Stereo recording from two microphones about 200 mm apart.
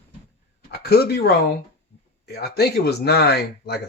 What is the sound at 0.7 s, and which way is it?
Speech, 50° left (ahead or behind).